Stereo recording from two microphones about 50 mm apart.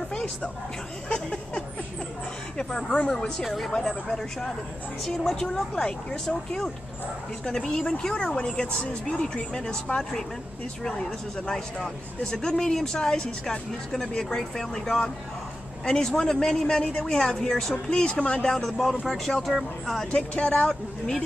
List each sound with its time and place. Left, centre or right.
0.1 s a sound: centre
2.5 s speech: centre
3.7 s speech: centre
20.1 s speech: centre